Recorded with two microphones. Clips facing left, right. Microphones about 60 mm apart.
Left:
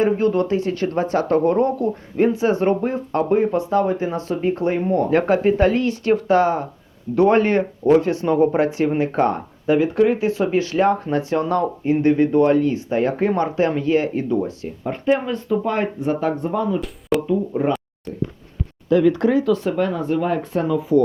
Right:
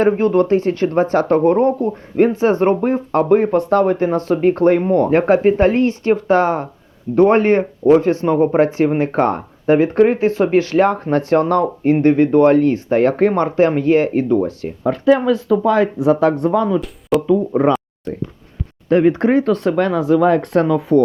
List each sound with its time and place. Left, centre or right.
0.2 s speech: right
2.1 s speech: right
14.8 s speech: right
18.9 s speech: right
19.7 s speech: right